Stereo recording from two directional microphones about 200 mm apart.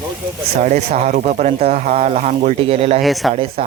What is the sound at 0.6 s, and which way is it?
Speech, 40° right (ahead or behind).